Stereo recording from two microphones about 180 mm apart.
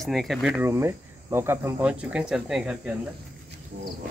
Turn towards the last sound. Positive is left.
turn(degrees=-45)  # may be behind; listen again after turning